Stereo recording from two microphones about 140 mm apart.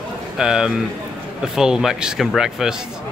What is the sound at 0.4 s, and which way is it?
A man's voice, 5° right (ahead or behind).